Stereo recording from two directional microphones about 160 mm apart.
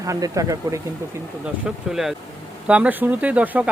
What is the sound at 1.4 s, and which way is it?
Speech, 5° right (ahead or behind).